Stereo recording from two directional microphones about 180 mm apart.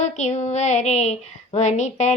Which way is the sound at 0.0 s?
40° left (ahead or behind).